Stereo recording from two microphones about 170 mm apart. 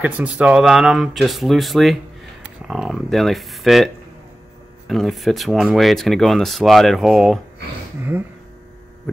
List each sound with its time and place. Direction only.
0.0 s speech: 5° right (ahead or behind)